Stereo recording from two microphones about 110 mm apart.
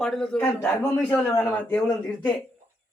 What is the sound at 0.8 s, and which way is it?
A man's voice, 20° left (ahead or behind).